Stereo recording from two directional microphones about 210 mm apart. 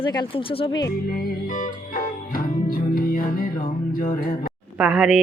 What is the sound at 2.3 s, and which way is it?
Music, 45° left (ahead or behind).